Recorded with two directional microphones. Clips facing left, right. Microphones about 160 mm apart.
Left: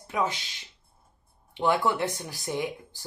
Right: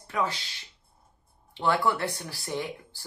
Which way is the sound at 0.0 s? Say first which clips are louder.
Left 1 dB; 20° left (ahead or behind).